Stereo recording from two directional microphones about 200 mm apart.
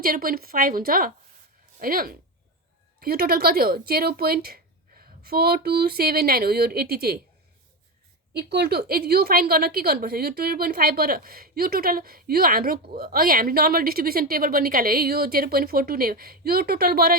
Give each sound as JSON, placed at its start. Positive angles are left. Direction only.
{"t": 0.0, "sound": "a woman's voice", "side_deg": -45}
{"t": 8.3, "sound": "a woman's voice", "side_deg": -55}